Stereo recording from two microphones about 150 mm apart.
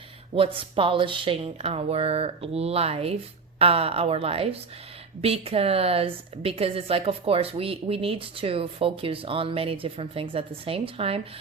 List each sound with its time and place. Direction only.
0.3 s a woman's voice: 35° right (ahead or behind)